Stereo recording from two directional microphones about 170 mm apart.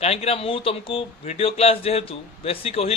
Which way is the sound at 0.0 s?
35° left (ahead or behind).